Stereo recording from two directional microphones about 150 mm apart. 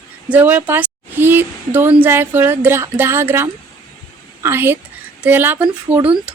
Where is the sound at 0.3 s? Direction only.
10° right (ahead or behind).